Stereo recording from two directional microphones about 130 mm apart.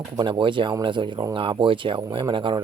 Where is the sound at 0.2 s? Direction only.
40° right (ahead or behind).